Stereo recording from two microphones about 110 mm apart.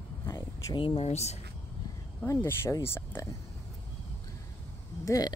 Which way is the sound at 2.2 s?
25° left (ahead or behind).